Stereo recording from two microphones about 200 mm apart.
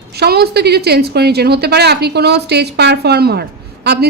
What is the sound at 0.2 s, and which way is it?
A woman's voice, 55° right (ahead or behind).